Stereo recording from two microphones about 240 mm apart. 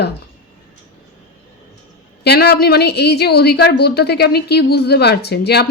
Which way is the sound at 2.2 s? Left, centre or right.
Left.